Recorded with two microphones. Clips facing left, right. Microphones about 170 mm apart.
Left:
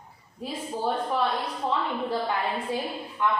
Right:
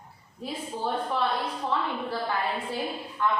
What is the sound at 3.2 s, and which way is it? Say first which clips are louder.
Speech: left 1 dB; 15° left (ahead or behind).